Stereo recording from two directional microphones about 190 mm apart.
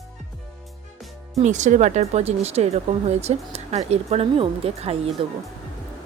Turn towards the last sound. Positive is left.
turn(degrees=-30)  # may be behind; listen again after turning